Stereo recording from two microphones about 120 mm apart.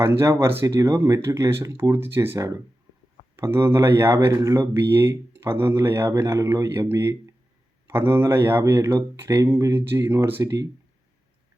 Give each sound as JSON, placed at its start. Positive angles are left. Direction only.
{"t": 0.0, "sound": "speech", "side_deg": -20}